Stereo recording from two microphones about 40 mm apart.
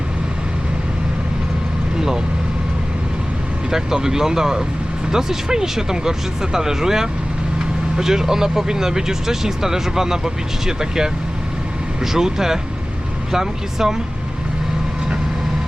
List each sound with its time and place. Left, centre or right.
3.7 s speech: centre
12.1 s speech: centre